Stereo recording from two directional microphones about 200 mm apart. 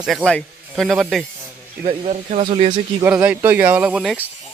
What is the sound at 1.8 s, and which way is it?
Speech, 30° right (ahead or behind).